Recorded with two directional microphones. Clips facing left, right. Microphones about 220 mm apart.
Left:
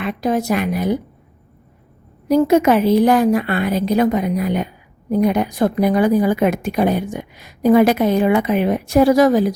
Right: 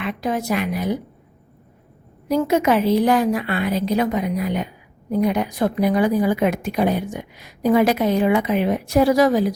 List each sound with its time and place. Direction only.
0.0 s a woman's voice: 40° left (ahead or behind)
2.3 s a woman's voice: 45° left (ahead or behind)